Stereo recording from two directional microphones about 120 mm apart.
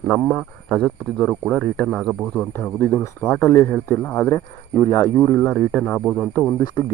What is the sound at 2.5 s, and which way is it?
A man's voice, 20° left (ahead or behind).